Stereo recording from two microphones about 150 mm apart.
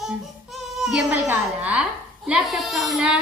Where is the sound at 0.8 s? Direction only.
Centre (ahead or behind).